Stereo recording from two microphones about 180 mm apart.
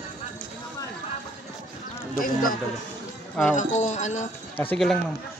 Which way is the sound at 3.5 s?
40° left (ahead or behind).